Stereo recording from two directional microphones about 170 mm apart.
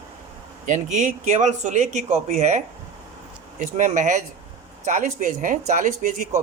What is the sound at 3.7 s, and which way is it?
Speech, 50° right (ahead or behind).